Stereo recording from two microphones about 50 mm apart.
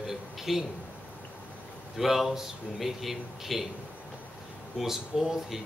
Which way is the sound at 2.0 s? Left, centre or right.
Centre.